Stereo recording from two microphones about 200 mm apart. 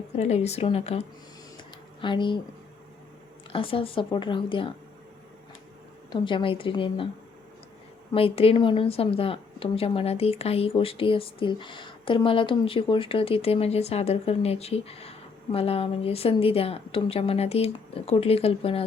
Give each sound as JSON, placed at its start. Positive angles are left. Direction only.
{"t": 0.2, "sound": "a woman's voice", "side_deg": 35}
{"t": 3.5, "sound": "a woman's voice", "side_deg": 25}
{"t": 6.1, "sound": "a woman's voice", "side_deg": 25}
{"t": 8.1, "sound": "a woman's voice", "side_deg": 30}